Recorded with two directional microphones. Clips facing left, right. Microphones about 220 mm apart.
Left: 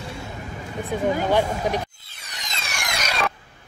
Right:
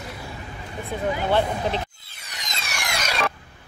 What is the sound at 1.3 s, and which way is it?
Speech, 15° left (ahead or behind).